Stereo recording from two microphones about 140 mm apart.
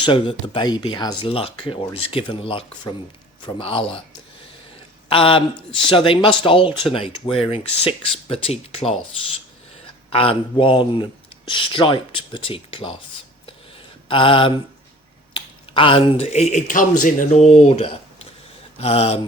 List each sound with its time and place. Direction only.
0.0 s speech: 35° left (ahead or behind)
5.0 s speech: 40° left (ahead or behind)
10.1 s speech: 40° left (ahead or behind)
14.1 s speech: 40° left (ahead or behind)